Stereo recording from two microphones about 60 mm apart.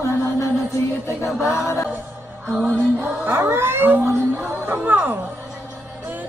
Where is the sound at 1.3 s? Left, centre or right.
Left.